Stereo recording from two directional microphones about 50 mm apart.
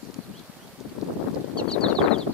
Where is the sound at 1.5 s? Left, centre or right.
Centre.